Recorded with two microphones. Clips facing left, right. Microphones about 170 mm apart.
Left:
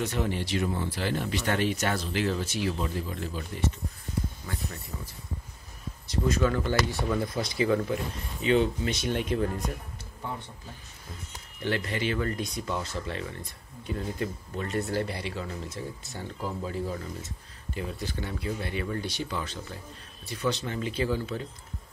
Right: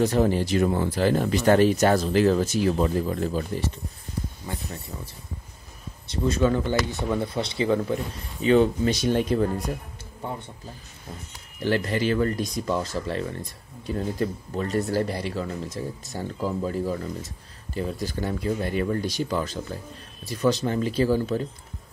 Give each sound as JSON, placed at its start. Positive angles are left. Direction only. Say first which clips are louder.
{"t": 0.0, "sound": "speech", "louder": "right 9 dB", "side_deg": -40}
{"t": 6.0, "sound": "speech", "louder": "right 4 dB", "side_deg": -25}
{"t": 11.6, "sound": "speech", "louder": "right 6 dB", "side_deg": -40}